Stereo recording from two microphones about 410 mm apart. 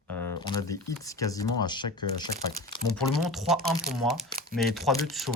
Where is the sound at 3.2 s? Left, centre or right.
Centre.